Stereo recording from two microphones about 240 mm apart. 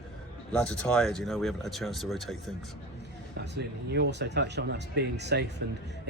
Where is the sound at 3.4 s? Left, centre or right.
Right.